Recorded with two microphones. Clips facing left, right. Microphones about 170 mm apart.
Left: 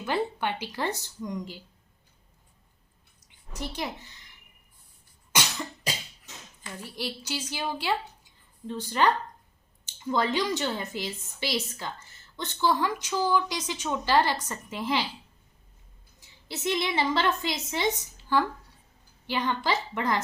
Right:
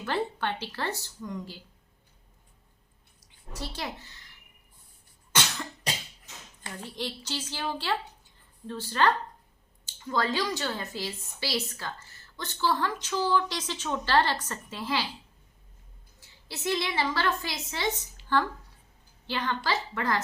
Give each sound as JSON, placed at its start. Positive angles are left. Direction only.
{"t": 0.0, "sound": "a woman's voice", "side_deg": 15}
{"t": 3.5, "sound": "a woman's voice", "side_deg": 15}
{"t": 5.3, "sound": "cough", "side_deg": 10}
{"t": 6.9, "sound": "a woman's voice", "side_deg": 10}
{"t": 16.5, "sound": "a woman's voice", "side_deg": 20}